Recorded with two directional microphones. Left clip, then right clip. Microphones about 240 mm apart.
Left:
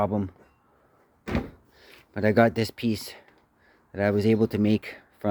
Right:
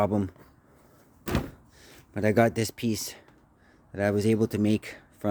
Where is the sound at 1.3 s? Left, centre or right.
Right.